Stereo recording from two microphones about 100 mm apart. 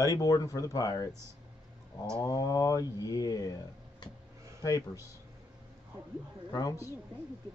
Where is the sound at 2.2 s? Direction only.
40° left (ahead or behind).